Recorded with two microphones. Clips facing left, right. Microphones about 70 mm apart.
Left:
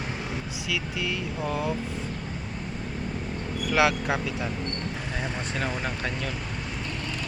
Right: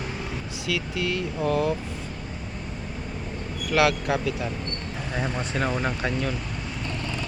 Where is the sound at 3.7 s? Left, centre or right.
Left.